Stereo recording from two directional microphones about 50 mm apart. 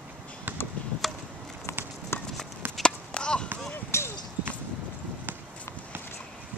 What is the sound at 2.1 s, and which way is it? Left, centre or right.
Clip-clop, left.